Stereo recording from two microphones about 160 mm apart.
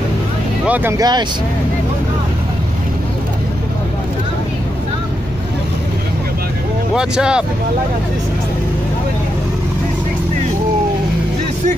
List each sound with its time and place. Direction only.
0.7 s speech: 10° right (ahead or behind)
0.9 s speech: 25° right (ahead or behind)
7.0 s speech: 5° right (ahead or behind)